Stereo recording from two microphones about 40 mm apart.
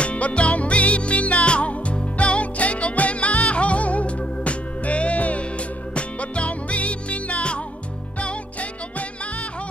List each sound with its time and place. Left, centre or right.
0.0 s music: left